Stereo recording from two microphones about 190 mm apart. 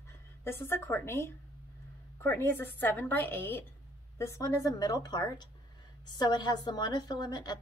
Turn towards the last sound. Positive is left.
turn(degrees=20)  # may be behind; listen again after turning